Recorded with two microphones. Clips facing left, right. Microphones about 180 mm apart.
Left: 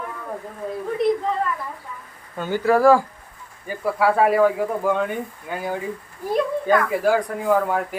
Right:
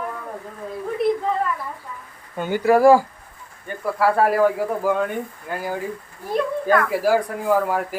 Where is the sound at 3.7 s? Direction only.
Centre (ahead or behind).